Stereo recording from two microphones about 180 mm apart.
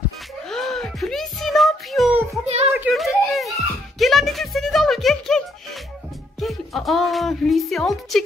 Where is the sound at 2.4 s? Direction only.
35° right (ahead or behind).